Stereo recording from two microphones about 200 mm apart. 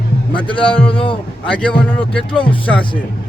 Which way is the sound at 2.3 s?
25° left (ahead or behind).